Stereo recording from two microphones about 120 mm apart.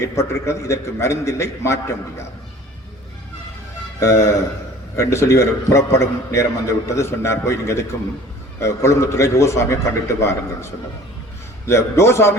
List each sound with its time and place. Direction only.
0.0 s a man's voice: 25° left (ahead or behind)
4.0 s a man's voice: 25° left (ahead or behind)
11.7 s a man's voice: 20° left (ahead or behind)